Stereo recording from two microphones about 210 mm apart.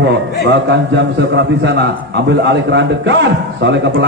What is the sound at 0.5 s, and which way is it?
A man's voice, 55° right (ahead or behind).